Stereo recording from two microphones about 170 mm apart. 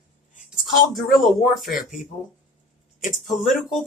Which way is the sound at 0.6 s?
Centre (ahead or behind).